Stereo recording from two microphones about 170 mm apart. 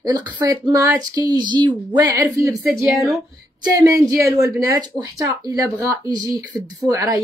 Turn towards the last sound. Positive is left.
turn(degrees=-20)  # may be behind; listen again after turning